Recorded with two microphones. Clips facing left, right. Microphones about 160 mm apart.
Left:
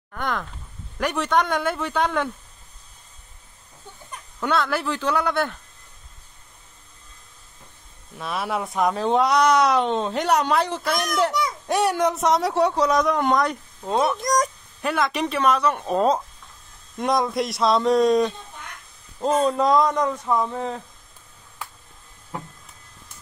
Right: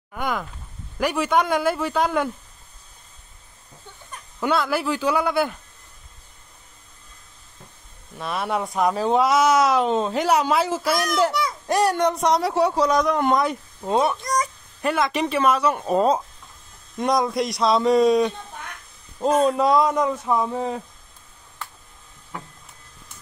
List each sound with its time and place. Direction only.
0.1 s a sound: 10° right (ahead or behind)
0.9 s speech: 5° right (ahead or behind)
4.4 s a man's voice: 5° right (ahead or behind)
8.2 s speech: centre (ahead or behind)
14.2 s speech: 45° left (ahead or behind)
14.8 s a man's voice: centre (ahead or behind)